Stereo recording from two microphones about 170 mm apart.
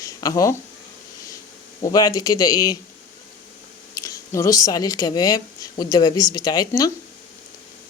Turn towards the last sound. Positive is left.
turn(degrees=20)  # may be behind; listen again after turning